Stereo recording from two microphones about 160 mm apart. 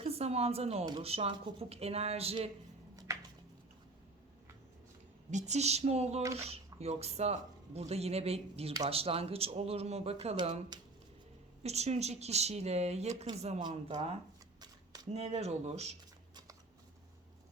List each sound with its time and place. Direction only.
0.0 s speech: 40° right (ahead or behind)
5.3 s speech: 45° right (ahead or behind)
11.6 s speech: 45° right (ahead or behind)
13.6 s speech: 30° right (ahead or behind)